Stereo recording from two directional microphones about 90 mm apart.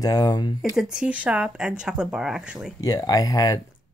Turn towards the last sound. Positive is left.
turn(degrees=45)  # may be behind; listen again after turning